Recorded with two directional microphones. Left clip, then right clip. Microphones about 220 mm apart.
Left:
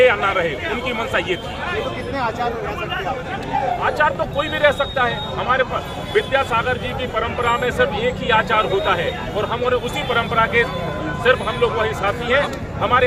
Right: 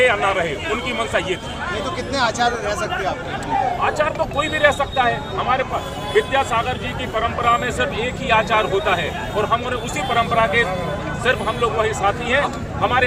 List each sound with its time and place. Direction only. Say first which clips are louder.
0.0 s speech: left 2 dB; 5° left (ahead or behind)
2.1 s a man's voice: right 4 dB; 50° right (ahead or behind)
3.8 s speech: left 1 dB; centre (ahead or behind)
10.3 s speech: left 1 dB; 5° left (ahead or behind)
11.8 s speech: right 1 dB; 5° left (ahead or behind)